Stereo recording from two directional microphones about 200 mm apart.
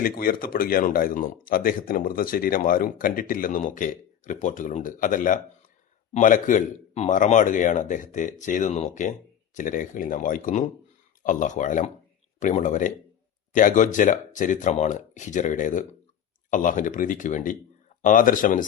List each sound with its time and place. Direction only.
0.0 s a man's voice: 45° left (ahead or behind)